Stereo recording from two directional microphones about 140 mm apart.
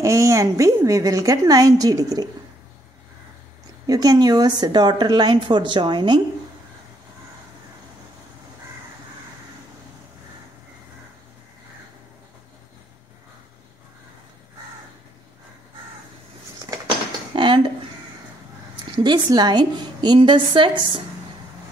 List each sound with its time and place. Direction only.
0.0 s a woman's voice: 20° right (ahead or behind)
3.8 s a woman's voice: 25° right (ahead or behind)
17.3 s dishes: 35° right (ahead or behind)
18.9 s a woman's voice: 35° right (ahead or behind)